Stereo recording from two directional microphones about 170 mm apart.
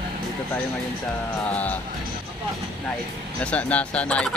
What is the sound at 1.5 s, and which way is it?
Speech, 10° left (ahead or behind).